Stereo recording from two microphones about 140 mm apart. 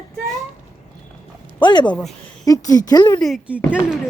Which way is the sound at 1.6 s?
35° left (ahead or behind).